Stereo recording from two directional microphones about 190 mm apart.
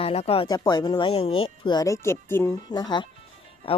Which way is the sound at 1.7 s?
20° left (ahead or behind).